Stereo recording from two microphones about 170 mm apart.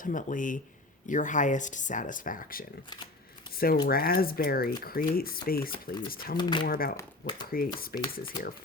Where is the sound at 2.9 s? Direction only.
25° left (ahead or behind).